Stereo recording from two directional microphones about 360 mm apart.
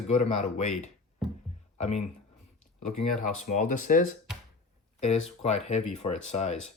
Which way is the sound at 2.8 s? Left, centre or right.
Left.